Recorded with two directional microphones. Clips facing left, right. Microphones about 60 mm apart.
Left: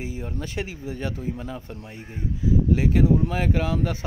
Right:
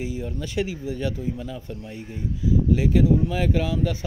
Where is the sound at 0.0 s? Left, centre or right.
Left.